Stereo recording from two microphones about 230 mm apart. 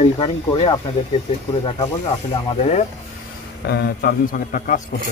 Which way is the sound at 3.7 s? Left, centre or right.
Left.